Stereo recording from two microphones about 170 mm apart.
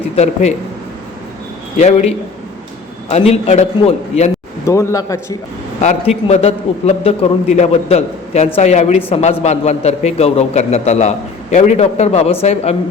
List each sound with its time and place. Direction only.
1.8 s a man's voice: 40° left (ahead or behind)
4.6 s speech: 15° left (ahead or behind)
5.8 s a man's voice: 40° left (ahead or behind)